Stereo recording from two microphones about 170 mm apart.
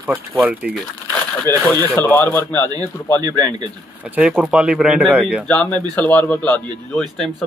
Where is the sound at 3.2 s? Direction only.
25° right (ahead or behind).